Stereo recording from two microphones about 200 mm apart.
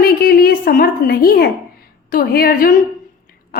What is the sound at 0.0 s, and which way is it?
A woman's voice, 50° left (ahead or behind).